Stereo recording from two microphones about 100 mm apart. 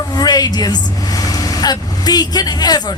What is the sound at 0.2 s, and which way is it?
Mantra, 45° left (ahead or behind).